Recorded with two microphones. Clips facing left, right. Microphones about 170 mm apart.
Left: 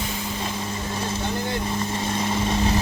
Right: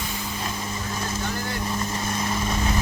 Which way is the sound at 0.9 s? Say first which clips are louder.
Left 3 dB; 30° left (ahead or behind).